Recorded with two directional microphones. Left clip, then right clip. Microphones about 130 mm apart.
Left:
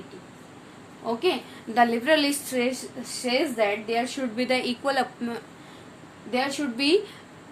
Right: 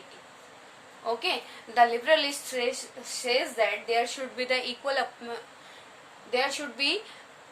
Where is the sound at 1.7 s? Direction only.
30° left (ahead or behind).